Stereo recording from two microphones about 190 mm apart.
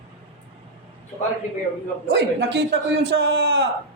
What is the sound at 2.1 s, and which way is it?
A man's voice, 65° right (ahead or behind).